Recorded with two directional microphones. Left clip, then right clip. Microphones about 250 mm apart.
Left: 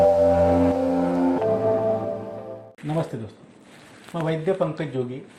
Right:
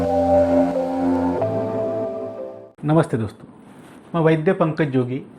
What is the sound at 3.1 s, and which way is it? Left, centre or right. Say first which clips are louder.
Speech: right 10 dB; right.